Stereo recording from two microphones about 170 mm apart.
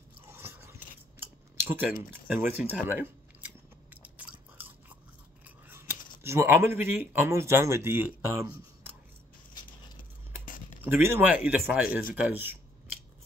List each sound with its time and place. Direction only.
0.2 s biting: 15° right (ahead or behind)
1.6 s speech: 10° right (ahead or behind)
2.9 s biting: 10° right (ahead or behind)
5.7 s speech: 15° right (ahead or behind)
10.4 s a sound: 50° left (ahead or behind)
10.8 s speech: 10° right (ahead or behind)